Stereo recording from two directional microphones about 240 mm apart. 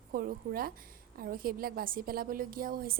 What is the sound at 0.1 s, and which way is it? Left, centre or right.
A woman's voice, right.